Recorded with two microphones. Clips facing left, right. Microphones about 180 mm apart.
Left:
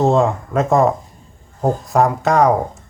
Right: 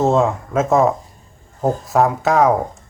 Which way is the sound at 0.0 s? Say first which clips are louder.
Left 1 dB; centre (ahead or behind).